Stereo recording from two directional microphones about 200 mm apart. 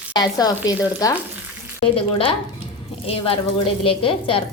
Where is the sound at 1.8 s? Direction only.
30° left (ahead or behind).